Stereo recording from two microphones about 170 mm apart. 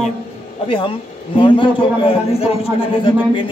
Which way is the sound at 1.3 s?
30° left (ahead or behind).